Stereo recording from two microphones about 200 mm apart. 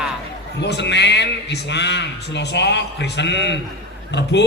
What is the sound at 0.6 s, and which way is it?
A man's voice, 60° left (ahead or behind).